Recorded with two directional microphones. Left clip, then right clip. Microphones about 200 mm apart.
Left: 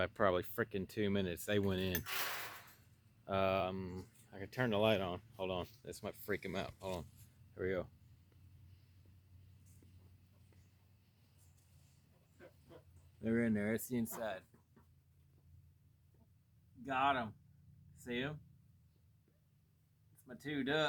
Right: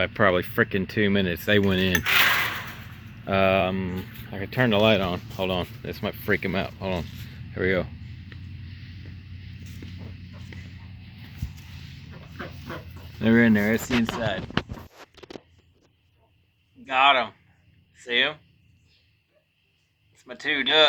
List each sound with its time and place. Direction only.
0.0 s speech: 15° left (ahead or behind)
13.2 s speech: 5° right (ahead or behind)
13.7 s speech: 10° left (ahead or behind)
16.8 s speech: 20° left (ahead or behind)
20.2 s speech: 20° left (ahead or behind)